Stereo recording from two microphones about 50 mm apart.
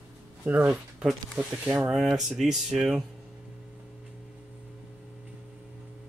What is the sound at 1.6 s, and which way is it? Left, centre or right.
Speech, right.